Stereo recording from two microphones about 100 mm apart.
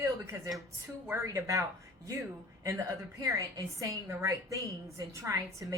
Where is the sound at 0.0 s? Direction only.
30° right (ahead or behind).